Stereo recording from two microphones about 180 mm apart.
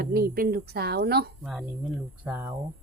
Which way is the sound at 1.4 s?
5° right (ahead or behind).